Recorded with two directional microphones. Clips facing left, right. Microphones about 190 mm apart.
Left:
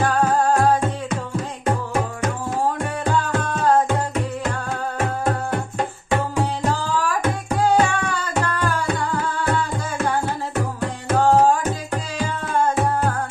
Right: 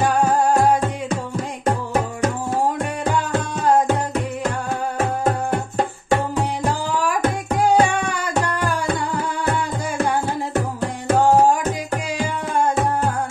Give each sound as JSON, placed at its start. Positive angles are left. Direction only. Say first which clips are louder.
{"t": 0.0, "sound": "music", "louder": "right 1 dB", "side_deg": -15}
{"t": 3.2, "sound": "music", "louder": "even", "side_deg": -15}
{"t": 6.7, "sound": "music", "louder": "right 1 dB", "side_deg": -15}
{"t": 11.1, "sound": "music", "louder": "even", "side_deg": -15}